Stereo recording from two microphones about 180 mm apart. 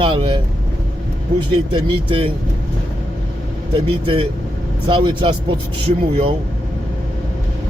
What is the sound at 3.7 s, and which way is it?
A man's voice, 30° right (ahead or behind).